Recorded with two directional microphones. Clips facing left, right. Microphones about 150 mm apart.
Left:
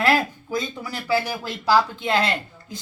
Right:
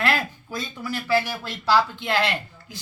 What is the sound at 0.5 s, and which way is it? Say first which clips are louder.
Speech: left 3 dB; 15° left (ahead or behind).